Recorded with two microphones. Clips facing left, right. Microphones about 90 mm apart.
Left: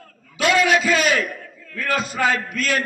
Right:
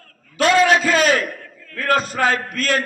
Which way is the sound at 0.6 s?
35° right (ahead or behind).